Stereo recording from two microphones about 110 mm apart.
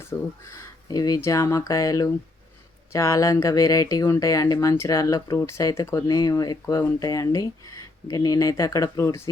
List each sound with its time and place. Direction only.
0.0 s speech: 25° left (ahead or behind)